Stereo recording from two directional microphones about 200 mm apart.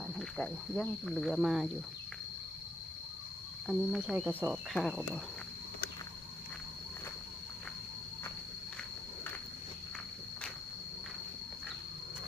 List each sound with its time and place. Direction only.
0.2 s speech: centre (ahead or behind)
3.7 s speech: centre (ahead or behind)